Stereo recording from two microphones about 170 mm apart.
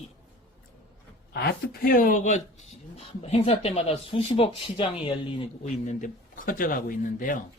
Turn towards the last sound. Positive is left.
turn(degrees=50)  # may be behind; listen again after turning